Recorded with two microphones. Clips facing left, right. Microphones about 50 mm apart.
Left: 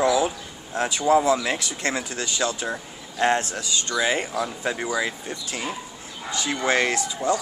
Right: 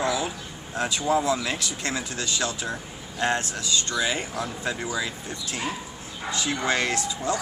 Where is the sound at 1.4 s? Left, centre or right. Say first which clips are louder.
Left 3 dB; left.